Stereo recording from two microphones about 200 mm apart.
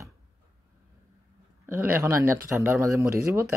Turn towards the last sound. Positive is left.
turn(degrees=-15)  # may be behind; listen again after turning